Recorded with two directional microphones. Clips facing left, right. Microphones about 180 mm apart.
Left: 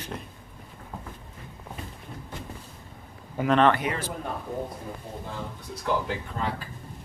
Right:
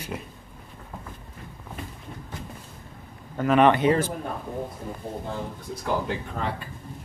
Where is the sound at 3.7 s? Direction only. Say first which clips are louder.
Right 7 dB; 25° right (ahead or behind).